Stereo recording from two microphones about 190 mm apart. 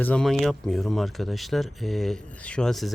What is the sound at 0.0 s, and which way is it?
Speech, 5° left (ahead or behind).